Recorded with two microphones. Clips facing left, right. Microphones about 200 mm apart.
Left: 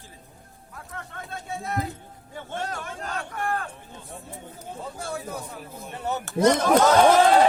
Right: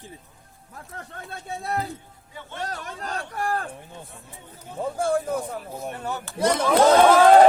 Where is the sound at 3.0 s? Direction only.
35° right (ahead or behind).